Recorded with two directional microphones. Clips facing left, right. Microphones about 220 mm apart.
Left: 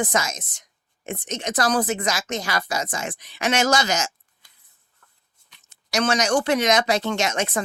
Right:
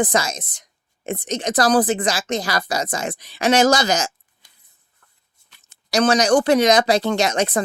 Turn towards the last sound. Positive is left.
turn(degrees=-35)  # may be behind; listen again after turning